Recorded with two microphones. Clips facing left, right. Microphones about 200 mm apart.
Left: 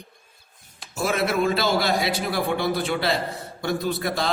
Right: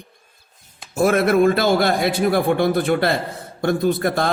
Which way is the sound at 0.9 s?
55° right (ahead or behind).